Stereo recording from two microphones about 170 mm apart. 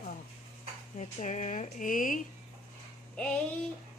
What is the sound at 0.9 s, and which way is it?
A woman's voice, 45° left (ahead or behind).